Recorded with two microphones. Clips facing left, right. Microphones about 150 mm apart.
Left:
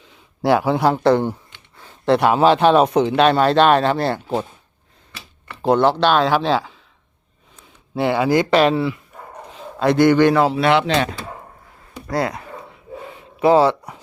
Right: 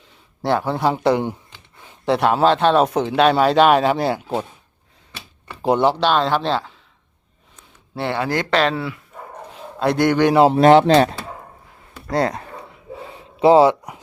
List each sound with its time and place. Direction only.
0.4 s speech: 5° left (ahead or behind)
0.9 s speech: 10° right (ahead or behind)
2.0 s speech: centre (ahead or behind)
5.5 s speech: 10° right (ahead or behind); by 6.7 s 5° left (ahead or behind)
7.9 s speech: 10° left (ahead or behind)
10.5 s speech: 40° right (ahead or behind)
13.4 s speech: 20° right (ahead or behind)